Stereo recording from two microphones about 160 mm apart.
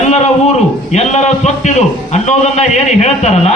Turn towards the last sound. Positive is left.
turn(degrees=45)  # may be behind; listen again after turning